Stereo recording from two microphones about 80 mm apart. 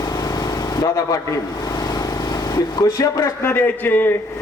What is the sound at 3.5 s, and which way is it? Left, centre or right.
Speech, left.